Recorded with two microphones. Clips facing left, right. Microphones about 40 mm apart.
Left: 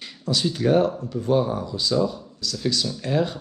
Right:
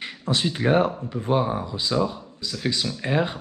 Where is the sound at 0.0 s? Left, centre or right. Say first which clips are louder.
Even; right.